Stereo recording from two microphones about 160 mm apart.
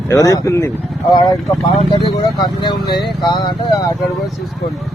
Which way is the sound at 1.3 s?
Centre (ahead or behind).